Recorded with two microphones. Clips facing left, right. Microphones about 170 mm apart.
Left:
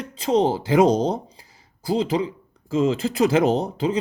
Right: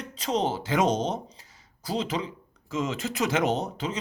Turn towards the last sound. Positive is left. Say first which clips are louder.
# left 7 dB
turn(degrees=30)  # may be behind; listen again after turning